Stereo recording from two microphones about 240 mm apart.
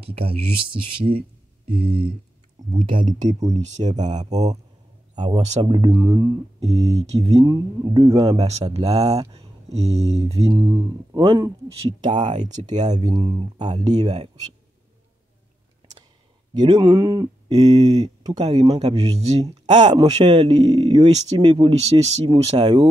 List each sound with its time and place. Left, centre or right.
0.0 s speech: right
3.3 s speech: right
5.1 s speech: centre
8.4 s speech: right
13.8 s speech: centre
14.1 s speech: right
16.5 s speech: centre